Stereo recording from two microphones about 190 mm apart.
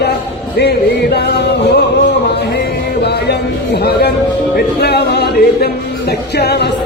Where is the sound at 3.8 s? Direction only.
60° left (ahead or behind).